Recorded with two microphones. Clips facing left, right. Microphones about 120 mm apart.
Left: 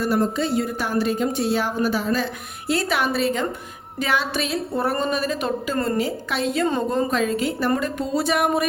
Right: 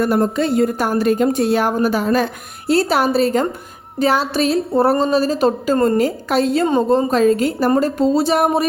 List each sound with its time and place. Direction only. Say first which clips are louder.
0.0 s a woman's voice: right 5 dB; 55° right (ahead or behind)
2.6 s a woman's voice: right 7 dB; 35° right (ahead or behind)
6.7 s speech: right 7 dB; 25° right (ahead or behind)
7.1 s a woman's voice: right 7 dB; 40° right (ahead or behind)